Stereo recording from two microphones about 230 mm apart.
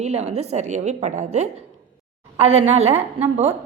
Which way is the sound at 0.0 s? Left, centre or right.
Right.